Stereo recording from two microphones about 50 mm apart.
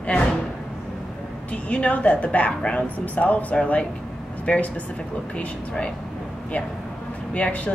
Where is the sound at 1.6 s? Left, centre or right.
Left.